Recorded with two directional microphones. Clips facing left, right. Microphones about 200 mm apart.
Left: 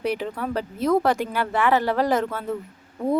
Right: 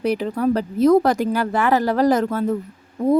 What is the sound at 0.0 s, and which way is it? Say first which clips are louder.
Speech: right 6 dB; 40° right (ahead or behind).